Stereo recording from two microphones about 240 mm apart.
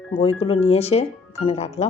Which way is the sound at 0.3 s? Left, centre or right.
Left.